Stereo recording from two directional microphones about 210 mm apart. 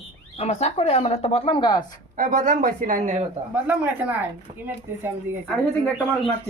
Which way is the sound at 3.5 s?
10° right (ahead or behind).